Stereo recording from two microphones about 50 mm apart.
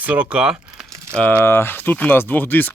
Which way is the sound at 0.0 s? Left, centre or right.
Right.